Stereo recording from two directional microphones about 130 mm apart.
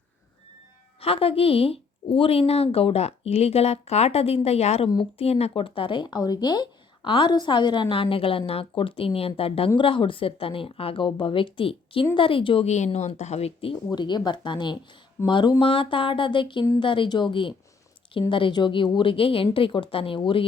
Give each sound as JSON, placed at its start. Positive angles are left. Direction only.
{"t": 1.0, "sound": "speech", "side_deg": 45}
{"t": 12.6, "sound": "speech", "side_deg": 60}